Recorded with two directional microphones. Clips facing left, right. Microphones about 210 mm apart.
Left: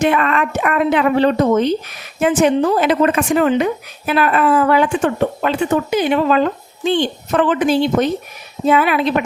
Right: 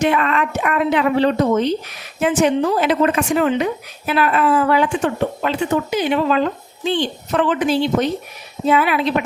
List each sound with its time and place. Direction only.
0.0 s speech: 55° left (ahead or behind)